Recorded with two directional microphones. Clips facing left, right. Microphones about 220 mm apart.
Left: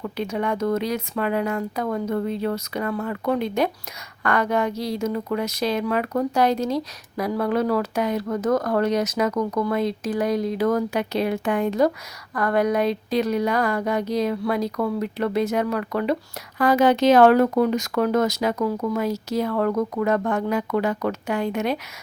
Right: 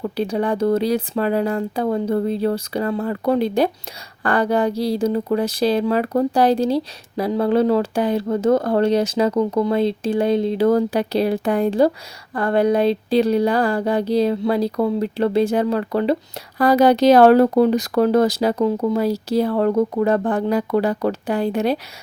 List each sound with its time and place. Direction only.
0.0 s speech: 35° right (ahead or behind)